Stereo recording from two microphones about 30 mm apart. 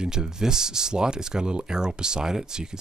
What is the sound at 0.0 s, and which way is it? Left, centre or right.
Speech, right.